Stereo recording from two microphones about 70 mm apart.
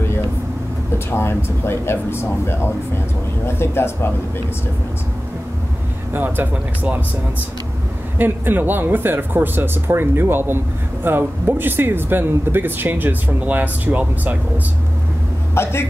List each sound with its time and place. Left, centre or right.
0.9 s speech: left
6.1 s speech: right
8.2 s speech: right
15.5 s a man's voice: left